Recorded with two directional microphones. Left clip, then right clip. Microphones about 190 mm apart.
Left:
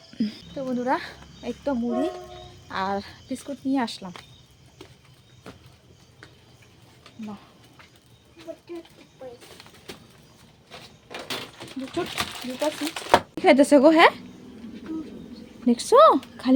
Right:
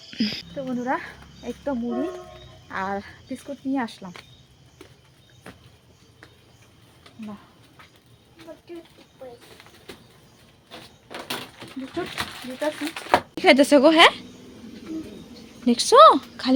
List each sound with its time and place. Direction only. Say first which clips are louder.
0.1 s speech: right 4 dB; 10° left (ahead or behind)
5.5 s a sound: even; 5° left (ahead or behind)
12.1 s speech: left 1 dB; 20° left (ahead or behind)
13.3 s speech: right 2 dB; centre (ahead or behind)
15.6 s speech: right 3 dB; 10° left (ahead or behind)